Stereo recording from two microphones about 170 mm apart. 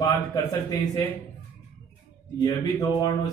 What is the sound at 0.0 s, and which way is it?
A man's voice, 20° left (ahead or behind).